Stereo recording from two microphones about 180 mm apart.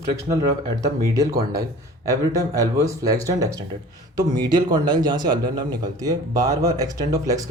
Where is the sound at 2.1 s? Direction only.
20° right (ahead or behind).